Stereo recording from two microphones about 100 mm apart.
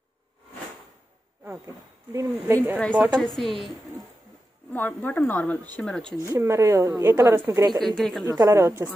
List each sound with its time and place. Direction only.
2.1 s speech: 20° right (ahead or behind)
3.2 s a woman's voice: centre (ahead or behind)
4.7 s speech: 20° left (ahead or behind)
6.2 s speech: 30° right (ahead or behind)
7.8 s a woman's voice: 5° left (ahead or behind)
8.3 s a woman's voice: 35° right (ahead or behind)